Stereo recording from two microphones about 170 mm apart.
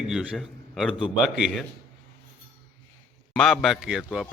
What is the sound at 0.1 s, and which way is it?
A man's voice, 5° right (ahead or behind).